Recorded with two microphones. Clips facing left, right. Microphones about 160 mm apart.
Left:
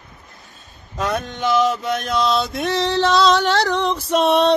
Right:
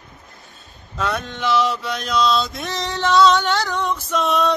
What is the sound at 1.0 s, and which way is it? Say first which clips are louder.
Mantra: left 2 dB; 45° left (ahead or behind).